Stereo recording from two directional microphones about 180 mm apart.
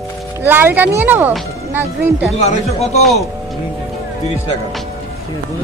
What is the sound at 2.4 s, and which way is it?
Speech, 40° left (ahead or behind).